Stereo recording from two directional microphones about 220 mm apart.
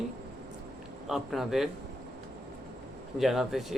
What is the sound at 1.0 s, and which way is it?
Speech, centre (ahead or behind).